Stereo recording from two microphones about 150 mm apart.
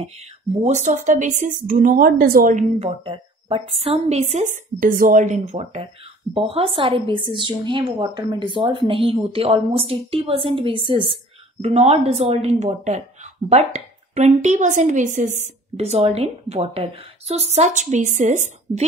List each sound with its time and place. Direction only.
0.0 s a woman's voice: 50° right (ahead or behind); by 2.5 s 85° right
2.5 s speech: 40° right (ahead or behind)
17.6 s speech: 50° right (ahead or behind)